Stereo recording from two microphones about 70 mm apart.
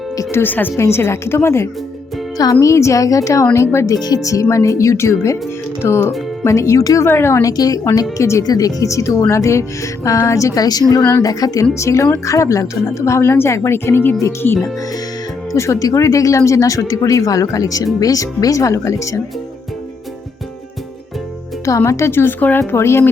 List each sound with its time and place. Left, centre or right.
0.3 s speech: left
2.4 s speech: left
3.5 s speech: left
3.9 s speech: left
7.0 s speech: left
7.4 s speech: left
8.2 s speech: left
8.4 s speech: left
11.7 s speech: left
15.5 s speech: left
21.6 s speech: left
22.7 s speech: left